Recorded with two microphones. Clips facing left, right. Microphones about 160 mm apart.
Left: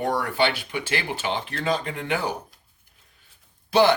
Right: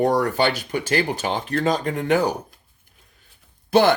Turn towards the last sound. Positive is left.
turn(degrees=-50)  # may be behind; listen again after turning